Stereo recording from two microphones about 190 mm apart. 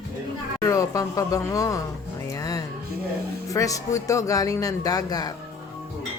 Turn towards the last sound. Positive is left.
turn(degrees=20)  # may be behind; listen again after turning